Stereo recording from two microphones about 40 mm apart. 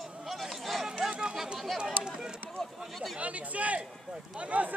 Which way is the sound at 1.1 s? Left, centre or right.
Centre.